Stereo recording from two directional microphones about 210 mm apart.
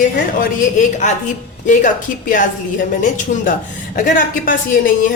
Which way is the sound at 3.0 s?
35° left (ahead or behind).